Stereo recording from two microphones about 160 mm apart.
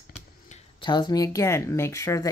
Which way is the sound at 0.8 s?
30° left (ahead or behind).